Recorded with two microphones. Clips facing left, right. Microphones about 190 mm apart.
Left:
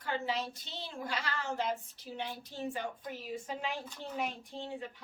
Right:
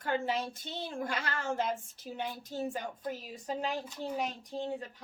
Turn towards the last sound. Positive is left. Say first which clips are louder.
# right 4 dB
turn(degrees=-40)  # may be behind; listen again after turning